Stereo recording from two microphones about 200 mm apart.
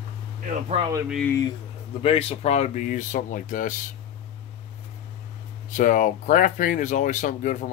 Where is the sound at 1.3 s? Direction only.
15° left (ahead or behind).